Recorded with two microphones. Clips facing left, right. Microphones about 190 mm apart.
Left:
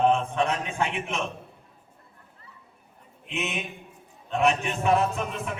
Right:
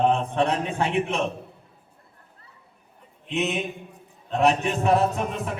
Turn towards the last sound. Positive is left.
turn(degrees=-35)  # may be behind; listen again after turning